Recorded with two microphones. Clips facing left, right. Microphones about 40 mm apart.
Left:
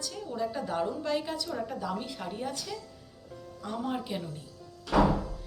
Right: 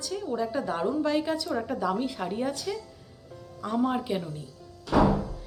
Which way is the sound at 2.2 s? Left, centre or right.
Right.